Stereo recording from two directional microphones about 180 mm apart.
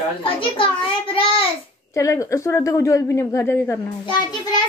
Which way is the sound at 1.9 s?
15° left (ahead or behind).